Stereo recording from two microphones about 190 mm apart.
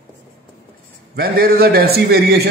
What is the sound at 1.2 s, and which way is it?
A man's voice, 50° right (ahead or behind).